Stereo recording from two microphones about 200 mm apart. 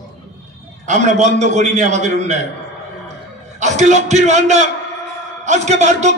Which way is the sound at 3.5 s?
35° right (ahead or behind).